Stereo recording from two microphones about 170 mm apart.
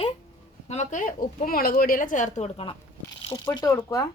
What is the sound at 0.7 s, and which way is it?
A woman's voice, 45° left (ahead or behind).